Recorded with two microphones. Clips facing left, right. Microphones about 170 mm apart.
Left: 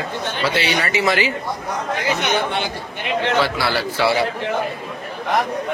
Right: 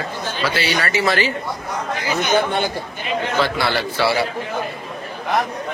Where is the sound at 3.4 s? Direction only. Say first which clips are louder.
Even; 5° left (ahead or behind).